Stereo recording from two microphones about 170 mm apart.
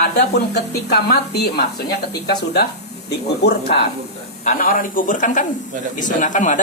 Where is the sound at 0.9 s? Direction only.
70° left (ahead or behind).